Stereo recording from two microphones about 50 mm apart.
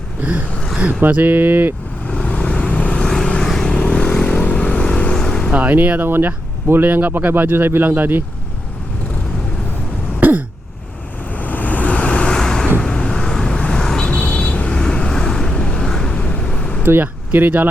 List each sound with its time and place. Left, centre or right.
0.2 s gasp: right
1.0 s speech: right
2.0 s vehicle: left
3.0 s vehicle: centre
5.1 s vehicle: centre
5.5 s speech: right
6.1 s speech: right
10.2 s throat clearing: right
11.3 s vehicle: left
12.4 s vehicle: centre
16.8 s speech: right